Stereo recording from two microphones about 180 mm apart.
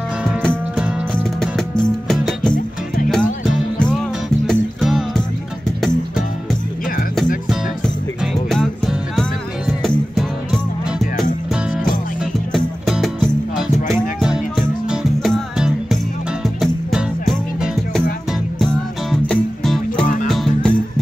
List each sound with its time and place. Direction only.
0.2 s music: 5° right (ahead or behind)
8.2 s music: centre (ahead or behind)
12.5 s music: centre (ahead or behind)
14.9 s music: 5° right (ahead or behind)